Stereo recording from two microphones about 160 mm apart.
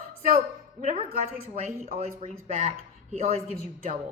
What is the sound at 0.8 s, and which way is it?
A woman's voice, 40° right (ahead or behind).